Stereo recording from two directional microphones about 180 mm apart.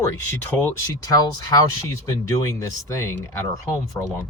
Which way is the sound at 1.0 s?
20° left (ahead or behind).